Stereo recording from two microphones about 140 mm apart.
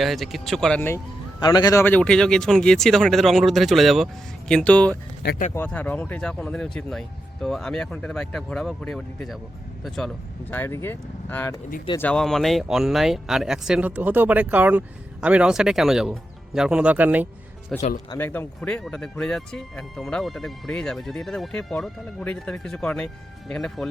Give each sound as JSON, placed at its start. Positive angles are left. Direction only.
{"t": 0.0, "sound": "speech", "side_deg": 0}
{"t": 0.8, "sound": "speech", "side_deg": 15}
{"t": 1.4, "sound": "a man's voice", "side_deg": 30}
{"t": 1.8, "sound": "speech", "side_deg": 10}
{"t": 10.5, "sound": "speech", "side_deg": 15}
{"t": 17.7, "sound": "speech", "side_deg": 5}
{"t": 18.2, "sound": "speech", "side_deg": 15}